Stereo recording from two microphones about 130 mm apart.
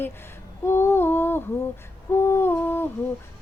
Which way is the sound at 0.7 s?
20° left (ahead or behind).